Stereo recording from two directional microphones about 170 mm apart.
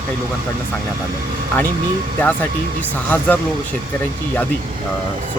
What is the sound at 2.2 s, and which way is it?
Speech, 10° left (ahead or behind).